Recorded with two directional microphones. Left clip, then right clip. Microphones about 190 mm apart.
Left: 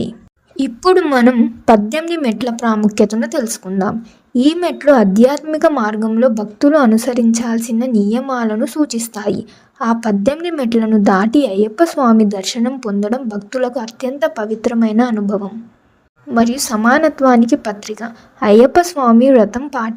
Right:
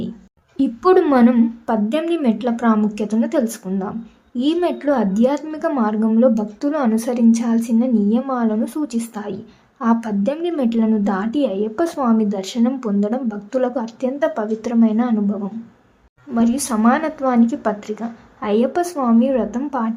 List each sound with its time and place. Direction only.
0.5 s a woman's voice: 40° left (ahead or behind)